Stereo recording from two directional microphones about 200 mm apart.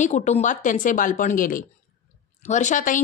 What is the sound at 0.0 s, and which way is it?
A woman's voice, 35° left (ahead or behind).